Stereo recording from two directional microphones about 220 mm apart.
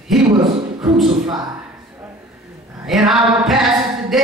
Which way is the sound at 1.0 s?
20° right (ahead or behind).